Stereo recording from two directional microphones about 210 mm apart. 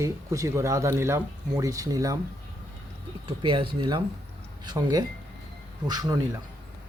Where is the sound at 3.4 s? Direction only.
25° right (ahead or behind).